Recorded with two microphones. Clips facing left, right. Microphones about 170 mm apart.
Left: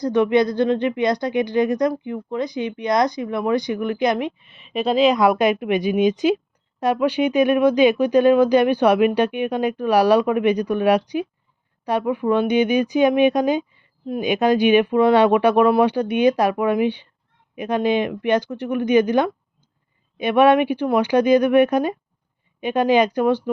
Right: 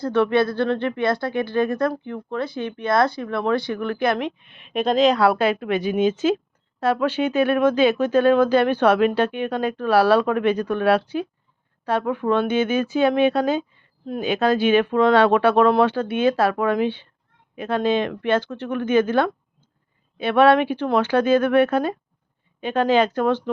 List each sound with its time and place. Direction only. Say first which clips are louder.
0.0 s speech: left 2 dB; 15° left (ahead or behind)
4.4 s speech: right 1 dB; 5° left (ahead or behind)